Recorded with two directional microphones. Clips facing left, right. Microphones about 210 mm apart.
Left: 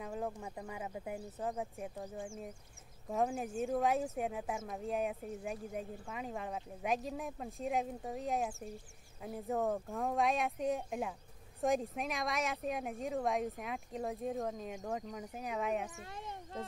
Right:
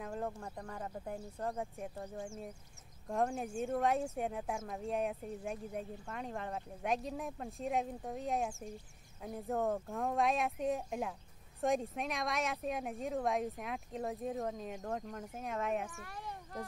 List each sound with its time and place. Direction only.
0.0 s speech: centre (ahead or behind)
15.9 s speech: 20° left (ahead or behind)